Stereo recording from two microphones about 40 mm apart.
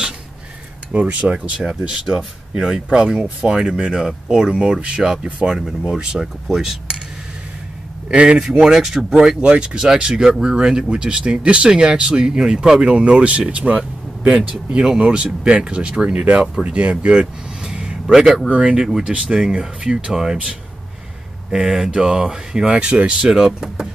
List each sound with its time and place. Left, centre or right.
0.9 s speech: right
2.0 s speech: centre
8.1 s speech: right
8.5 s speech: centre
17.6 s a sound: centre
18.5 s speech: centre
20.1 s speech: centre
21.5 s speech: centre
22.7 s speech: right
23.3 s speech: centre